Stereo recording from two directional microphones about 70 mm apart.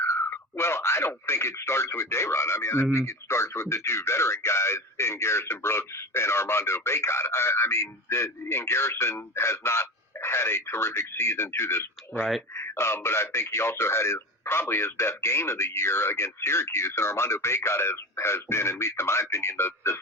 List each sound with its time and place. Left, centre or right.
0.0 s speech: left